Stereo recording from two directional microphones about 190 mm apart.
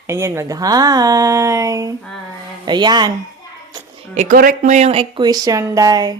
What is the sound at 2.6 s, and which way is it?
Speech, 25° right (ahead or behind).